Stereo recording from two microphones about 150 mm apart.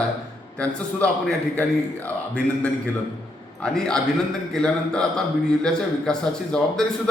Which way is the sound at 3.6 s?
5° left (ahead or behind).